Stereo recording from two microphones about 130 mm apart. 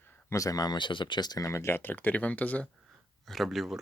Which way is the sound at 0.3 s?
25° left (ahead or behind).